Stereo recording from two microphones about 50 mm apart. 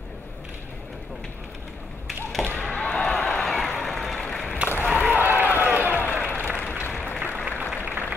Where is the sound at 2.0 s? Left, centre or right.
Centre.